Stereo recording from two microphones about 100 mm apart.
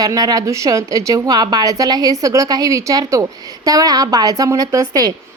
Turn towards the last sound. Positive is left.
turn(degrees=-40)  # may be behind; listen again after turning